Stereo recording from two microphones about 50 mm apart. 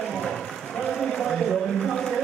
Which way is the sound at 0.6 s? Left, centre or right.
Left.